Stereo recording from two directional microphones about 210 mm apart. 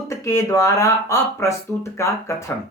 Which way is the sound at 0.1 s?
15° left (ahead or behind).